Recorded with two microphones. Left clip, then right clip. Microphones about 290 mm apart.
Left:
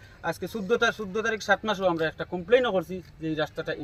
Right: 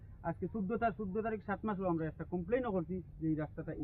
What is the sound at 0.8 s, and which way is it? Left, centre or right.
A man's voice, centre.